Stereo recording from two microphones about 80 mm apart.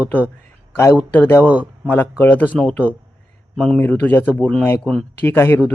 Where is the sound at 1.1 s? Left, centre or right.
Left.